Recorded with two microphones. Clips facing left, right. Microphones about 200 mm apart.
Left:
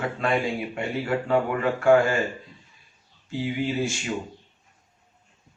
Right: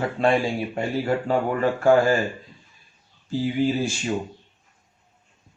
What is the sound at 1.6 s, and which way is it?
Speech, 35° right (ahead or behind).